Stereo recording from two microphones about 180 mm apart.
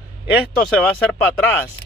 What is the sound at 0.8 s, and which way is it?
Speech, 5° left (ahead or behind).